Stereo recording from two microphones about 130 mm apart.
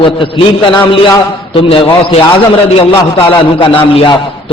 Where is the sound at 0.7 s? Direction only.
35° left (ahead or behind).